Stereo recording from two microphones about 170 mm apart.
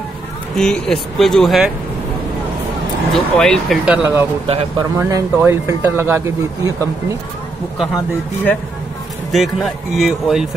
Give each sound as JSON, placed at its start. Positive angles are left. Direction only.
{"t": 0.6, "sound": "speech", "side_deg": 5}
{"t": 3.1, "sound": "speech", "side_deg": 5}
{"t": 4.5, "sound": "speech", "side_deg": -35}
{"t": 4.9, "sound": "speech", "side_deg": -15}
{"t": 9.3, "sound": "speech", "side_deg": 0}